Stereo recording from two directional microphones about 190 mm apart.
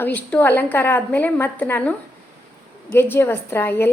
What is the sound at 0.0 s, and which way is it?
A woman's voice, 10° left (ahead or behind).